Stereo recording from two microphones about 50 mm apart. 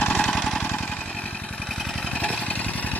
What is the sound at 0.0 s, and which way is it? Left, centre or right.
Vehicle, left.